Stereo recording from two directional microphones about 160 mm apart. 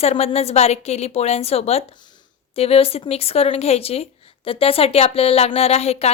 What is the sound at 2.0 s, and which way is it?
A woman's voice, 25° left (ahead or behind).